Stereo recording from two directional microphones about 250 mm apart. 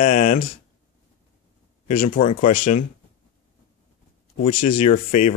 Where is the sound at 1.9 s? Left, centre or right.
Left.